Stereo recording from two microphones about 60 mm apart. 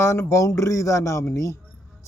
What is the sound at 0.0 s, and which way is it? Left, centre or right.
Speech, left.